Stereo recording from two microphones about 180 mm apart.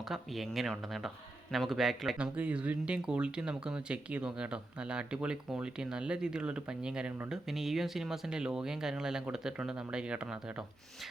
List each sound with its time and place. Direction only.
0.1 s speech: centre (ahead or behind)